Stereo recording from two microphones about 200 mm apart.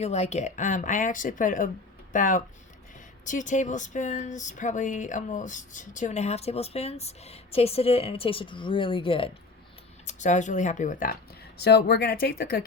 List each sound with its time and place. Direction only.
0.0 s speech: 35° left (ahead or behind)
10.1 s speech: 35° left (ahead or behind)